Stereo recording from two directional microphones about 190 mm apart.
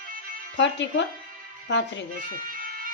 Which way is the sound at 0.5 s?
70° left (ahead or behind).